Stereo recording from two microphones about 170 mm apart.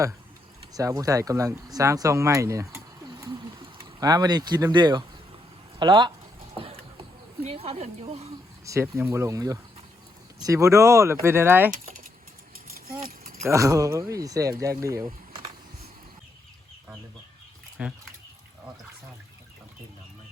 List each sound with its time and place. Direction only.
0.7 s speech: 20° right (ahead or behind)
6.6 s a sound: 35° right (ahead or behind)
7.4 s speech: 35° right (ahead or behind)
8.6 s speech: 15° right (ahead or behind)
13.1 s a sound: 60° right (ahead or behind)
13.4 s speech: 15° right (ahead or behind)
17.8 s speech: 5° right (ahead or behind)